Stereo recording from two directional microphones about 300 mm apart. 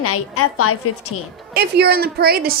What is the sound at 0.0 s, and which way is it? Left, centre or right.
Speech, left.